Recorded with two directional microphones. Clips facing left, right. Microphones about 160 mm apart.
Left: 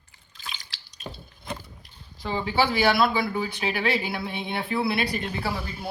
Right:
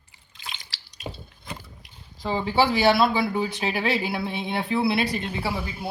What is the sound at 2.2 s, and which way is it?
Speech, 30° right (ahead or behind).